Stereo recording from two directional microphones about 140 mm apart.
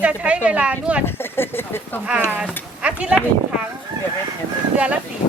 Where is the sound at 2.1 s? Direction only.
10° right (ahead or behind).